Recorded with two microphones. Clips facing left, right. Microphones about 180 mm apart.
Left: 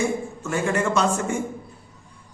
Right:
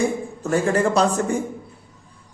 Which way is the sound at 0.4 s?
35° right (ahead or behind).